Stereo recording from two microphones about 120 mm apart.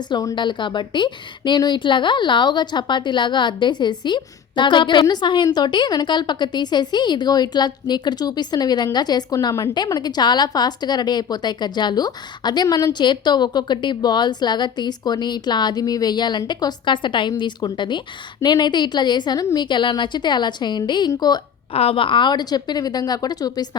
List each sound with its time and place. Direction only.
0.1 s a woman's voice: 35° left (ahead or behind)
21.7 s a woman's voice: 55° left (ahead or behind); by 23.6 s 35° left (ahead or behind)